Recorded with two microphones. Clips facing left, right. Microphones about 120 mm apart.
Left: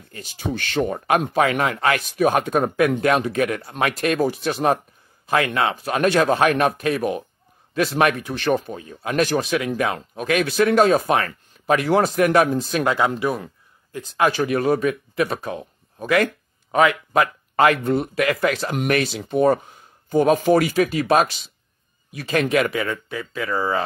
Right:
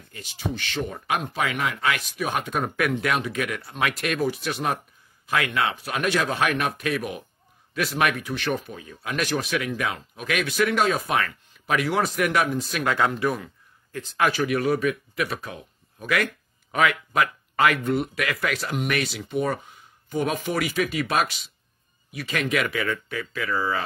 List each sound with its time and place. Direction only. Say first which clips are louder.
0.1 s speech: left 1 dB; 45° left (ahead or behind)
0.5 s speech: left 7 dB; 55° left (ahead or behind); by 9.7 s 30° left (ahead or behind)
9.7 s a man's voice: left 5 dB; 40° left (ahead or behind)
19.2 s speech: left 8 dB; 40° left (ahead or behind)